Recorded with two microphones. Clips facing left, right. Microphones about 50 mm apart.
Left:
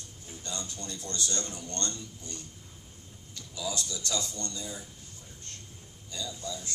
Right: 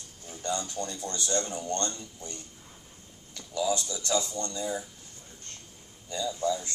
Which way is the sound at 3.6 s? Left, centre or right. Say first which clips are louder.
Right 6 dB; centre.